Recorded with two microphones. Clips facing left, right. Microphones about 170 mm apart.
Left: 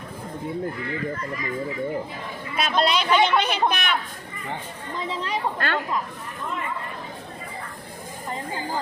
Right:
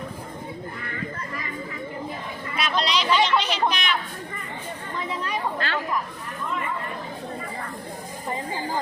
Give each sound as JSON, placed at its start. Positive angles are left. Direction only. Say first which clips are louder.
{"t": 2.6, "sound": "speech", "louder": "left 3 dB", "side_deg": 50}
{"t": 4.9, "sound": "speech", "louder": "left 1 dB", "side_deg": 30}
{"t": 5.5, "sound": "a woman's voice", "louder": "left 2 dB", "side_deg": 55}